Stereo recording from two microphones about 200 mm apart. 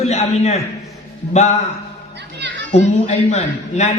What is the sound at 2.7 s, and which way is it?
A man's voice, 35° left (ahead or behind).